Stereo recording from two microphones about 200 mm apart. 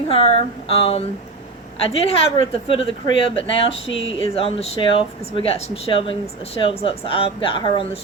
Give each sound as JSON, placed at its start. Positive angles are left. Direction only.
{"t": 0.1, "sound": "speech", "side_deg": 30}